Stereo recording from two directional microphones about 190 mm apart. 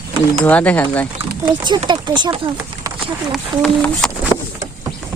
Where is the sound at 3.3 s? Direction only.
Centre (ahead or behind).